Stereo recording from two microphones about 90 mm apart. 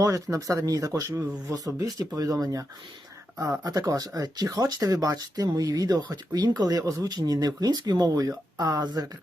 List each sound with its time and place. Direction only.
0.0 s speech: 40° right (ahead or behind)